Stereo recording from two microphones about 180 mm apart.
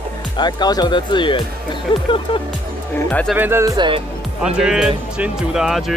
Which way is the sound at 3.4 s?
15° right (ahead or behind).